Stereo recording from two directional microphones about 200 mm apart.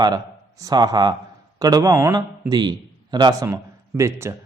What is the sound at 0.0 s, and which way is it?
A man's voice, 20° right (ahead or behind).